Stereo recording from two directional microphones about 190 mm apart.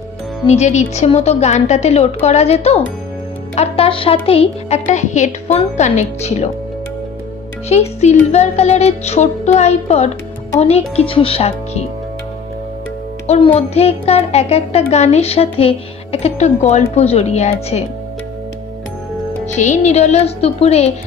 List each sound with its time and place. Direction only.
0.5 s a woman's voice: 35° left (ahead or behind)
7.7 s a woman's voice: 35° left (ahead or behind)
13.6 s a woman's voice: 35° left (ahead or behind)
19.4 s a woman's voice: 40° left (ahead or behind)